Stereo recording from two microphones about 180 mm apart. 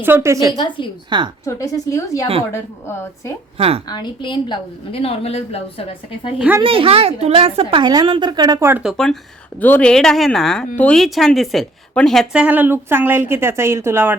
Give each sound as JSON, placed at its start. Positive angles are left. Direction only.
{"t": 0.0, "sound": "a woman's voice", "side_deg": -15}
{"t": 0.5, "sound": "a woman's voice", "side_deg": 25}
{"t": 1.1, "sound": "a woman's voice", "side_deg": -25}
{"t": 1.5, "sound": "speech", "side_deg": 20}
{"t": 3.6, "sound": "a woman's voice", "side_deg": -30}
{"t": 3.8, "sound": "a woman's voice", "side_deg": 25}
{"t": 6.6, "sound": "a woman's voice", "side_deg": -30}
{"t": 8.8, "sound": "a woman's voice", "side_deg": 0}